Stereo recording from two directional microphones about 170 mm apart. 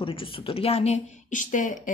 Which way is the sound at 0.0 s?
30° left (ahead or behind).